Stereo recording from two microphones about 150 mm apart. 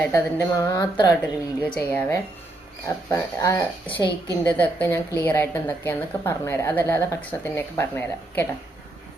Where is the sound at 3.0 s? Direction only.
20° left (ahead or behind).